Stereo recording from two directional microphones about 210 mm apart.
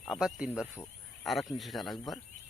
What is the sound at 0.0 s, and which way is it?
Speech, centre (ahead or behind).